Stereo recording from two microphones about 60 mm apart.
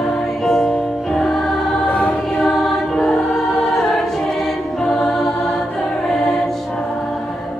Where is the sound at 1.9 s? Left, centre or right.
Left.